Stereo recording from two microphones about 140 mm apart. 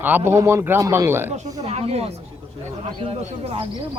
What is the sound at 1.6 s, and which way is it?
Speech, 45° right (ahead or behind).